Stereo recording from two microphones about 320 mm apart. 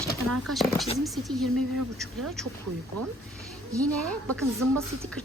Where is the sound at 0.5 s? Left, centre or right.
Centre.